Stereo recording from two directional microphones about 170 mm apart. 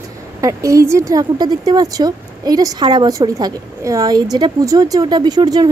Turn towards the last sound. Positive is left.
turn(degrees=-25)  # may be behind; listen again after turning